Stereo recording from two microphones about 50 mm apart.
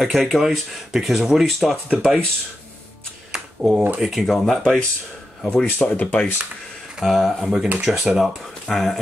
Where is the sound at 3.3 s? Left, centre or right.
Centre.